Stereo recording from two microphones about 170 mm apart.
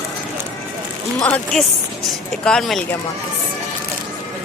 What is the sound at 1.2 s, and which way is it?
Speech, 5° left (ahead or behind).